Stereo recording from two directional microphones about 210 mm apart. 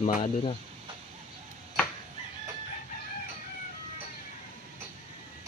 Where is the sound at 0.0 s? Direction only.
30° left (ahead or behind).